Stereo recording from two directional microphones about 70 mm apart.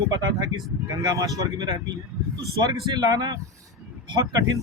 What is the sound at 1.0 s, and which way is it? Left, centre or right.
Speech, right.